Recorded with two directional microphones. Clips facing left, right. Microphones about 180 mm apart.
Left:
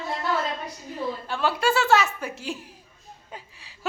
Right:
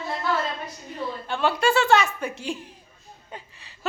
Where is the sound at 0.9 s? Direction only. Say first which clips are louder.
Even; 5° left (ahead or behind).